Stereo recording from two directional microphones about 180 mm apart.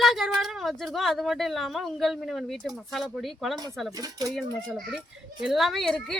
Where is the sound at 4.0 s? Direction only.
20° right (ahead or behind).